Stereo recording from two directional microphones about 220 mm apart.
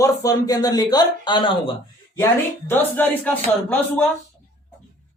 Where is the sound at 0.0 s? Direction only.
15° left (ahead or behind).